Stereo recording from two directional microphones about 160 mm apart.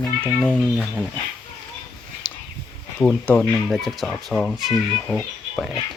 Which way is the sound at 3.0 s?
10° left (ahead or behind).